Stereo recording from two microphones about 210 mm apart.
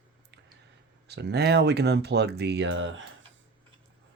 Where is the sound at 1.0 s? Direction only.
50° right (ahead or behind).